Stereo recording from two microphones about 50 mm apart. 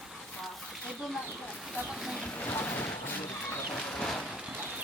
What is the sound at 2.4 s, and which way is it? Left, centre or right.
Boat, left.